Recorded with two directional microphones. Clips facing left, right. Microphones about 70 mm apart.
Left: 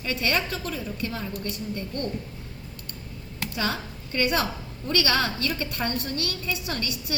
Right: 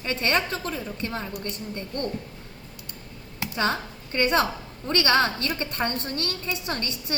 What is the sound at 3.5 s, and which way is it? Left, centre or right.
A woman's voice, right.